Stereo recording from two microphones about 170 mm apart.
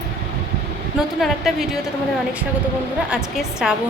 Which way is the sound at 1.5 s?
Centre (ahead or behind).